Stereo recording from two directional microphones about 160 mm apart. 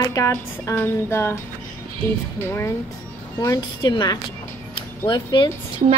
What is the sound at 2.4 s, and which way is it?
A woman's voice, 15° left (ahead or behind).